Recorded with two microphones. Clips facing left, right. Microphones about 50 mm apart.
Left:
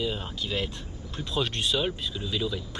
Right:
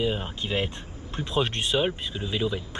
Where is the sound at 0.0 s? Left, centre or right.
Right.